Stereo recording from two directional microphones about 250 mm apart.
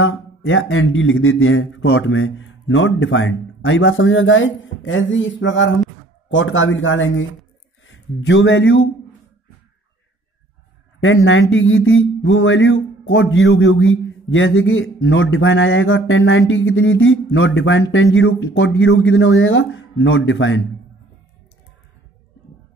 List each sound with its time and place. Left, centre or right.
0.0 s speech: left
11.0 s speech: left